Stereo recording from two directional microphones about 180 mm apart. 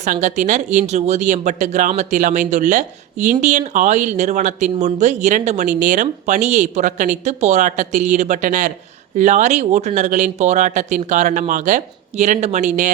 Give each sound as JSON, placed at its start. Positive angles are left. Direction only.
{"t": 0.0, "sound": "speech", "side_deg": -40}